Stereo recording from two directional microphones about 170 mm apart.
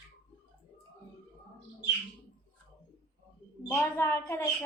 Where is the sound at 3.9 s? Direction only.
15° left (ahead or behind).